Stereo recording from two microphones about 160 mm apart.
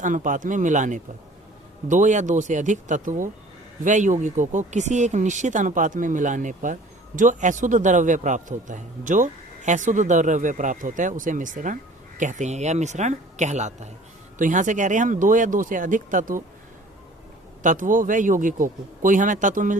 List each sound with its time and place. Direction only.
0.0 s a man's voice: 55° right (ahead or behind)
17.6 s a man's voice: 55° right (ahead or behind)